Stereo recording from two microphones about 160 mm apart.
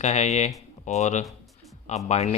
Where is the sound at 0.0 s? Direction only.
45° left (ahead or behind).